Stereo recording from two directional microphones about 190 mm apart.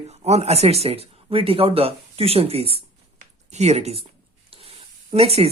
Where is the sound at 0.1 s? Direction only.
35° right (ahead or behind).